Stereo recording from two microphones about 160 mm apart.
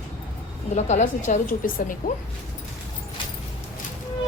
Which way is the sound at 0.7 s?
50° left (ahead or behind).